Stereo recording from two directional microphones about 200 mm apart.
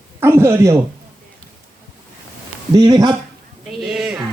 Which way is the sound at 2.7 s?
20° right (ahead or behind).